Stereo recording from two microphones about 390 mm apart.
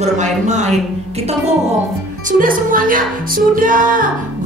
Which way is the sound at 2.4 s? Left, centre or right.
Right.